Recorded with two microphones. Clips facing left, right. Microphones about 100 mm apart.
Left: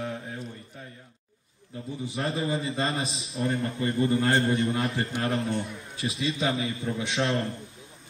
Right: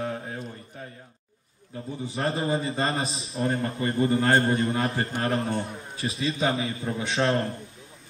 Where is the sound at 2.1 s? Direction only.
35° right (ahead or behind).